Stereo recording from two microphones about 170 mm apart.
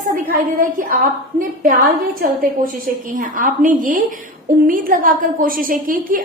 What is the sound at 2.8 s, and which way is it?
A woman's voice, 50° right (ahead or behind).